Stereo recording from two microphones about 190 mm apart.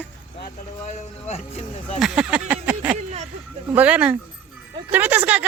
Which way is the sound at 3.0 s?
35° right (ahead or behind).